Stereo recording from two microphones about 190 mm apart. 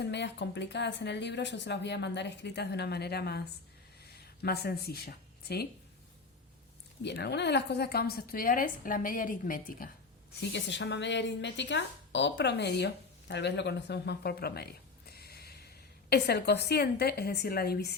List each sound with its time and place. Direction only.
0.0 s speech: 65° left (ahead or behind)
4.4 s speech: 55° left (ahead or behind)
7.0 s a woman's voice: 60° left (ahead or behind)
10.5 s a woman's voice: 70° left (ahead or behind)